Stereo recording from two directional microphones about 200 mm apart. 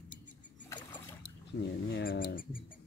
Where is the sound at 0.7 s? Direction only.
20° left (ahead or behind).